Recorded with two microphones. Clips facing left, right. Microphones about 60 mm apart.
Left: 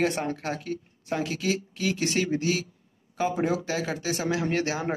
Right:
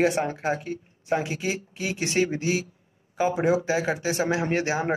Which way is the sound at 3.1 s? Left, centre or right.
Centre.